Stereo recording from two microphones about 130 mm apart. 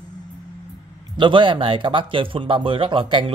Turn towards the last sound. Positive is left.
turn(degrees=-40)  # may be behind; listen again after turning